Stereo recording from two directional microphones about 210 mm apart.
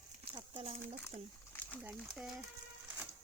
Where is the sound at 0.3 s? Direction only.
25° right (ahead or behind).